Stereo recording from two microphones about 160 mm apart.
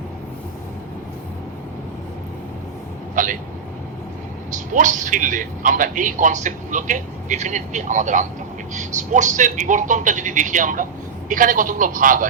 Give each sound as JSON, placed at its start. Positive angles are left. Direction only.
{"t": 3.2, "sound": "vehicle", "side_deg": -50}
{"t": 4.5, "sound": "a man's voice", "side_deg": -50}